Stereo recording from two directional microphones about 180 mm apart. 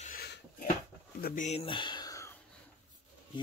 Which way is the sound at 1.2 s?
45° left (ahead or behind).